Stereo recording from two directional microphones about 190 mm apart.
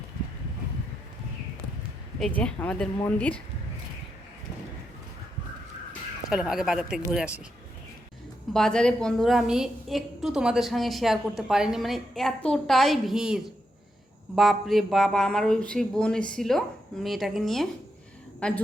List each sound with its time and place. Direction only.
2.1 s speech: 5° left (ahead or behind)
6.3 s a woman's voice: centre (ahead or behind)
8.5 s a woman's voice: 5° left (ahead or behind)